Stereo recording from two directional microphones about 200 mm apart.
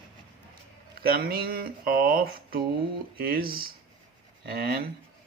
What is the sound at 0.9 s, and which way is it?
Speech, 50° right (ahead or behind).